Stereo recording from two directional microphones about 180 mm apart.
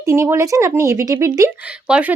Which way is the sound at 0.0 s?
15° right (ahead or behind).